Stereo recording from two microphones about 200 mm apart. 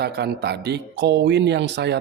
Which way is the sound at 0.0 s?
55° right (ahead or behind).